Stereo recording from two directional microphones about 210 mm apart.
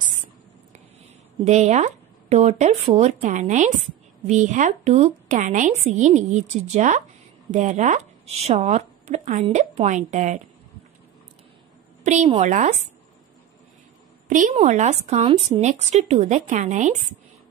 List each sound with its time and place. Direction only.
1.4 s a woman's voice: 30° right (ahead or behind)
12.0 s a woman's voice: 35° right (ahead or behind)
14.2 s a woman's voice: 40° right (ahead or behind)